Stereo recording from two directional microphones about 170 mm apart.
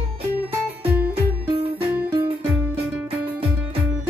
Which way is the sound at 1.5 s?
30° right (ahead or behind).